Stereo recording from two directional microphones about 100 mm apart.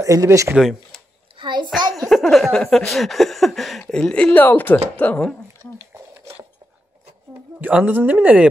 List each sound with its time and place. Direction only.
0.0 s speech: 30° right (ahead or behind)
0.6 s speech: centre (ahead or behind)
1.4 s a child's voice: 50° right (ahead or behind)
2.0 s a sound: 5° left (ahead or behind)
3.9 s speech: 10° left (ahead or behind)
7.6 s speech: 15° right (ahead or behind)